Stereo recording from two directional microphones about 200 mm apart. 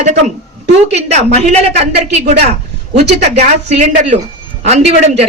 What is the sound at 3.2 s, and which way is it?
A woman's voice, 35° right (ahead or behind).